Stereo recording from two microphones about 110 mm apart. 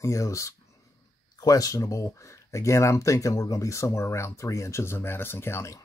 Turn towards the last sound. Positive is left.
turn(degrees=25)  # may be behind; listen again after turning